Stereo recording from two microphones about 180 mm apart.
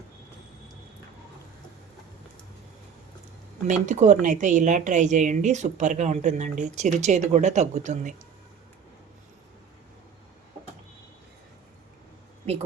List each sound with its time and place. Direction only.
3.7 s a woman's voice: 45° right (ahead or behind)